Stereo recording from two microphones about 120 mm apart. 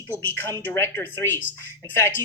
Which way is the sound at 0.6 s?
20° left (ahead or behind).